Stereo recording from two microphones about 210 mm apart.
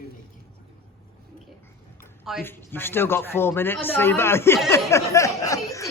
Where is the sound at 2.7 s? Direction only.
10° left (ahead or behind).